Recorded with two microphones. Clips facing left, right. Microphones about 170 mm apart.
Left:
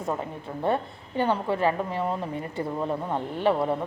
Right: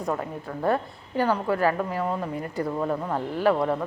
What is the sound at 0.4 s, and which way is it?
A woman's voice, 25° left (ahead or behind).